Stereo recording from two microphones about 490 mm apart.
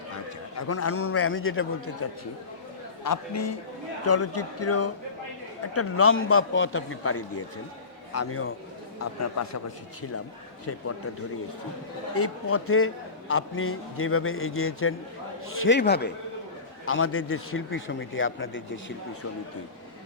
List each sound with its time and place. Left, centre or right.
0.1 s a man's voice: left
10.7 s a man's voice: left
12.1 s a man's voice: left